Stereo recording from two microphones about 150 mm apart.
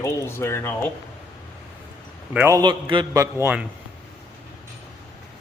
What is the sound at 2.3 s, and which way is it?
A man's voice, 10° right (ahead or behind).